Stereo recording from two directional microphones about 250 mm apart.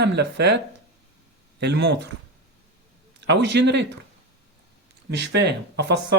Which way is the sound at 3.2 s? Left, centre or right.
Right.